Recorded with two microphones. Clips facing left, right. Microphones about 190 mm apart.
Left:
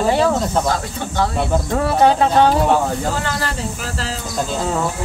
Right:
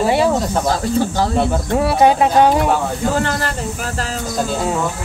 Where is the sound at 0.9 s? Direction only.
35° right (ahead or behind).